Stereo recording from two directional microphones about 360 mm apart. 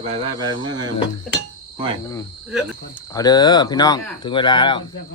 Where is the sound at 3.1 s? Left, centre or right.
Centre.